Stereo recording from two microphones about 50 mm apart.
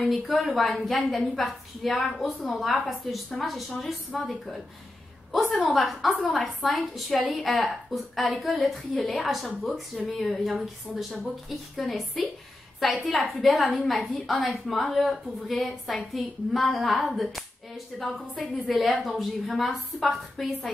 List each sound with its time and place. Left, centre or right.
0.0 s a woman's voice: centre
5.8 s a woman's voice: centre